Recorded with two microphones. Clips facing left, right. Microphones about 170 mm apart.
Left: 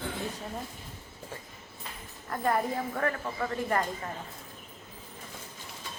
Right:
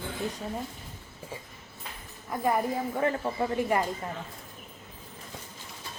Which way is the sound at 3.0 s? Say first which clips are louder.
Right 5 dB; 25° right (ahead or behind).